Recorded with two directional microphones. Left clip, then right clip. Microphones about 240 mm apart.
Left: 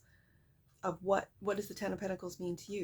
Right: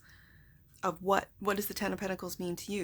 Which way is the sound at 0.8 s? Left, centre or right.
Right.